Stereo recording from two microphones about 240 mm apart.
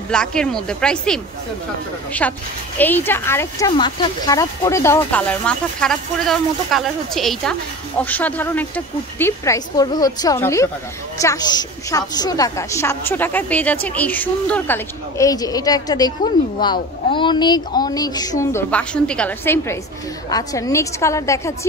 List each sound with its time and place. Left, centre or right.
0.1 s a woman's voice: centre
2.2 s speech: centre